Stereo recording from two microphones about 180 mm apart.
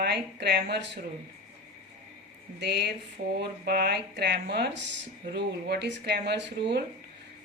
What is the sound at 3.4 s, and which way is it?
Speech, 60° right (ahead or behind).